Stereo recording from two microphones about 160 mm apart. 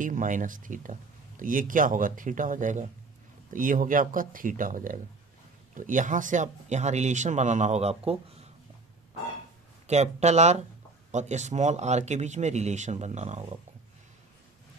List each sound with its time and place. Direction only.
0.0 s speech: 55° right (ahead or behind); by 8.5 s 40° right (ahead or behind)
9.8 s speech: 45° right (ahead or behind)